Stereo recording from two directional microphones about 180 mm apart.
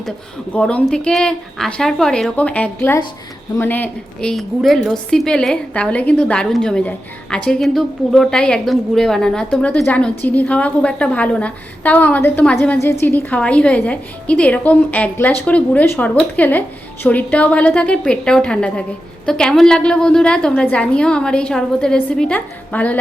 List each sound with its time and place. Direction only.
0.5 s a woman's voice: 5° left (ahead or behind)